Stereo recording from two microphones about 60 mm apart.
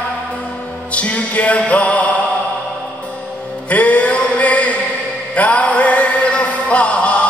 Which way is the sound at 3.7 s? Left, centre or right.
Left.